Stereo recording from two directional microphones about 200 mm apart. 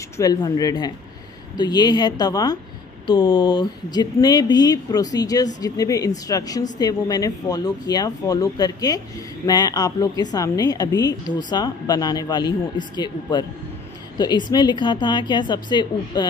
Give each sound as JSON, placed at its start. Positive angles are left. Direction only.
{"t": 0.2, "sound": "a man's voice", "side_deg": 20}